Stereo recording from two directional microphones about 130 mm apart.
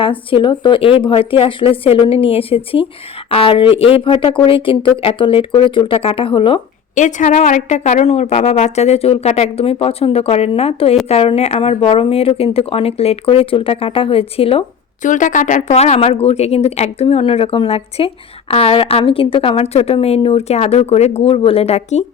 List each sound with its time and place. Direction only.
0.0 s a woman's voice: 45° left (ahead or behind)
6.9 s a woman's voice: 70° left (ahead or behind); by 14.6 s 45° left (ahead or behind)
15.0 s a woman's voice: 80° left
15.7 s a woman's voice: 55° left (ahead or behind)